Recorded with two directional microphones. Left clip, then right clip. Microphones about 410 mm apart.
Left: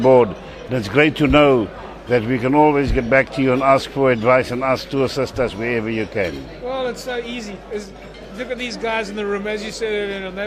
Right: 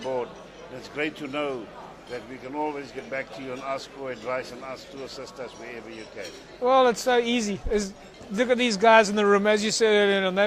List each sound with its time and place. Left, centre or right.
0.0 s speech: left
6.7 s speech: right
8.4 s a man's voice: right